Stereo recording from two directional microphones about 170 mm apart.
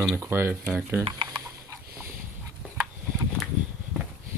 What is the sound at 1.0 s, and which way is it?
Speech, 30° right (ahead or behind).